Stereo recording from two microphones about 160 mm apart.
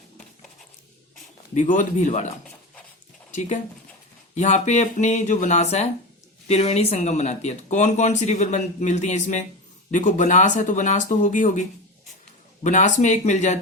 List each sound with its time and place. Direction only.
1.5 s speech: 55° left (ahead or behind)
3.3 s speech: 50° left (ahead or behind)
12.6 s speech: 50° left (ahead or behind)